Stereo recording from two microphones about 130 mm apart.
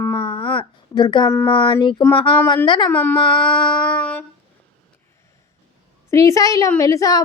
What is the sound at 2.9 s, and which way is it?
Speech, 15° left (ahead or behind).